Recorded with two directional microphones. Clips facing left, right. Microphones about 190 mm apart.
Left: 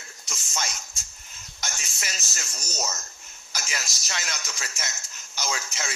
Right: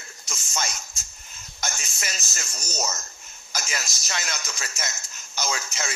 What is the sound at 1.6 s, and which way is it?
A man's voice, 50° right (ahead or behind).